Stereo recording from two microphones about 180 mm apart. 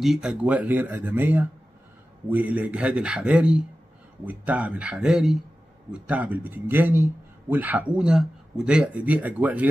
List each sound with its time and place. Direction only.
0.0 s a man's voice: 5° right (ahead or behind)